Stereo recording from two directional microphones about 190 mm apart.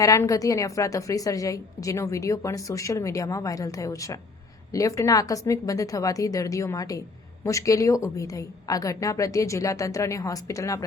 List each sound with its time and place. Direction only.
0.0 s a woman's voice: 15° left (ahead or behind)